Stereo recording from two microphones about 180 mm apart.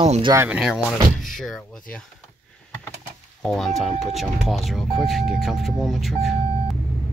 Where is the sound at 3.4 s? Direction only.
Centre (ahead or behind).